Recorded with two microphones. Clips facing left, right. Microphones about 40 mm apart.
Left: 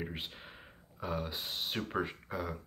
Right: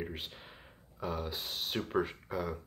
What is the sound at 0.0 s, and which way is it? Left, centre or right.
Speech, centre.